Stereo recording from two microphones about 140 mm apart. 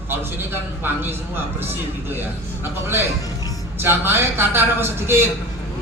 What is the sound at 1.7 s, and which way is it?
Speech, 15° right (ahead or behind).